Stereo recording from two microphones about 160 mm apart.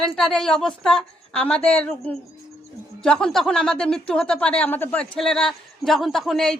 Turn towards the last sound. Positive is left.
turn(degrees=0)  # may be behind; listen again after turning